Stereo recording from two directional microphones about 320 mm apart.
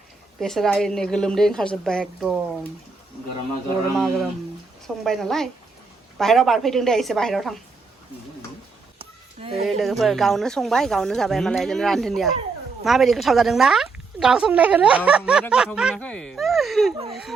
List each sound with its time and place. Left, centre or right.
0.3 s speech: centre
3.9 s speech: centre
9.0 s a sound: centre
9.6 s speech: centre